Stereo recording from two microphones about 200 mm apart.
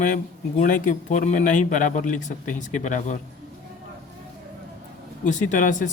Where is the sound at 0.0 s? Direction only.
40° left (ahead or behind).